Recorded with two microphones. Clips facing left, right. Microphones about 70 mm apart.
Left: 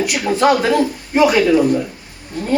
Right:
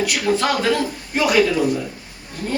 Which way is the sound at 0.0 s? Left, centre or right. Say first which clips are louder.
Left 4 dB; centre.